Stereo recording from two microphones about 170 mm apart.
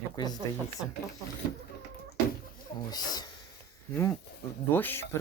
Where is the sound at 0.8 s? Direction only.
5° right (ahead or behind).